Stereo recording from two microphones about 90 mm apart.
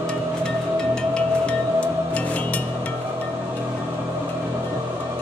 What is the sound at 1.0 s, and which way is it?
Music, 15° left (ahead or behind).